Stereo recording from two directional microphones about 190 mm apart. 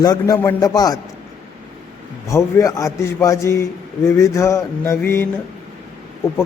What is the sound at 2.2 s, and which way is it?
A man's voice, 15° left (ahead or behind).